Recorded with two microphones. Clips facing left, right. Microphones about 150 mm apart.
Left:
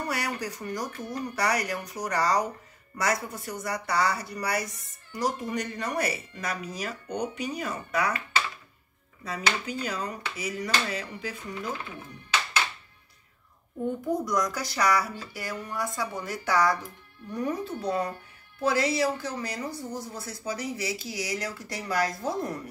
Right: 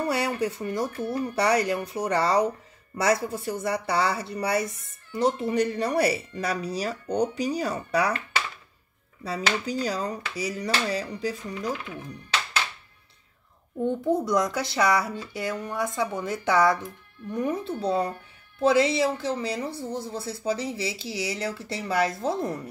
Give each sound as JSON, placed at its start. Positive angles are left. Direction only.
{"t": 0.0, "sound": "speech", "side_deg": -25}
{"t": 9.2, "sound": "speech", "side_deg": -35}
{"t": 13.8, "sound": "speech", "side_deg": -25}